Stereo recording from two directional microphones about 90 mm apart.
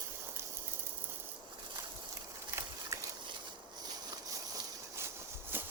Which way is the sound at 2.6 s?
30° right (ahead or behind).